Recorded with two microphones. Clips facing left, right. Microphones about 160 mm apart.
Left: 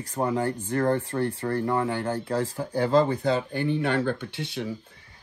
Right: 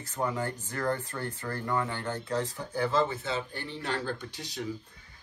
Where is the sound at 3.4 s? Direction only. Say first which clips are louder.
Left 11 dB; 60° left (ahead or behind).